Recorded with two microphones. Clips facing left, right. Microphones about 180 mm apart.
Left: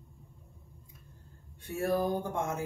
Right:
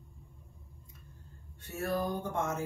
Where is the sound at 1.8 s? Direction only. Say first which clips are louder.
Left 3 dB; 10° left (ahead or behind).